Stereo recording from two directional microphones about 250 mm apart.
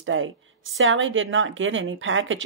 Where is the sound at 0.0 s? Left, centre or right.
Right.